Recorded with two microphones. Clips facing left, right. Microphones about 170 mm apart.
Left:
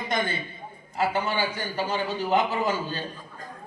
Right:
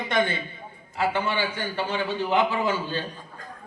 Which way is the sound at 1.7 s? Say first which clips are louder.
Right 1 dB; 40° left (ahead or behind).